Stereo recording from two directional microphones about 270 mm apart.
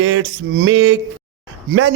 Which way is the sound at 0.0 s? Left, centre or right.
Right.